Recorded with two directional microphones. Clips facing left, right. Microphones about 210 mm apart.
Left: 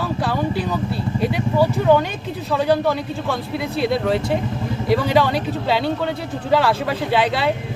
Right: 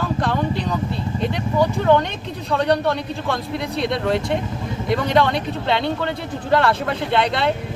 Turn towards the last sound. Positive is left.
turn(degrees=5)  # may be behind; listen again after turning